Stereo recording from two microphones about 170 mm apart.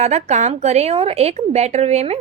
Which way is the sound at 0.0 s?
40° right (ahead or behind).